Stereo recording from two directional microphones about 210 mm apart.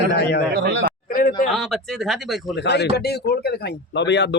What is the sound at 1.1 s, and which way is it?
Speech, 40° left (ahead or behind).